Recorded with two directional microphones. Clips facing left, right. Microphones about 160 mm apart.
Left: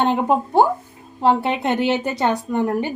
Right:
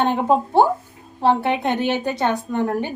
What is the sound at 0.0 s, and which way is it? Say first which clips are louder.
A woman's voice: even; 15° left (ahead or behind).